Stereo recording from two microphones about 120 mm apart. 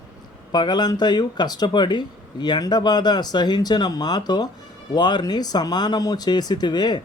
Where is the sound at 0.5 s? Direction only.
40° left (ahead or behind).